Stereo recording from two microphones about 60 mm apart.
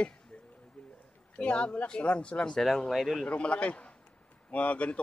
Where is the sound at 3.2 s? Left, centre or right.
Left.